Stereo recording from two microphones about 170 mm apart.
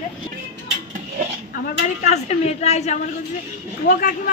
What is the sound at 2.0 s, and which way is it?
Speech, 40° left (ahead or behind).